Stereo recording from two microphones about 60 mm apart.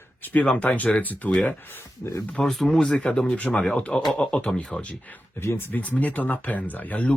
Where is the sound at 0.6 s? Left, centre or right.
Left.